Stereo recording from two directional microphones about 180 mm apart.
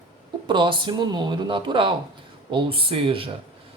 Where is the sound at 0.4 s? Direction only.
25° right (ahead or behind).